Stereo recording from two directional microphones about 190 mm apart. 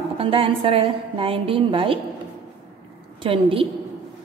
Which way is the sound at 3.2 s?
30° right (ahead or behind).